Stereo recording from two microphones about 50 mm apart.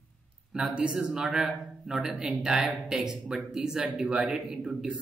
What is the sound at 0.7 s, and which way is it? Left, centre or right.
A man's voice, centre.